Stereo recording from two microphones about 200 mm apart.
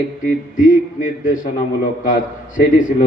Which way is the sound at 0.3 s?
40° left (ahead or behind).